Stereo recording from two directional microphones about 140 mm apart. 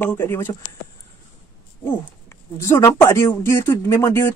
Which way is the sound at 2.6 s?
20° left (ahead or behind).